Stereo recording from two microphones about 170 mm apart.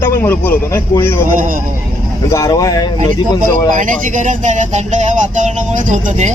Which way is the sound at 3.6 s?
50° right (ahead or behind).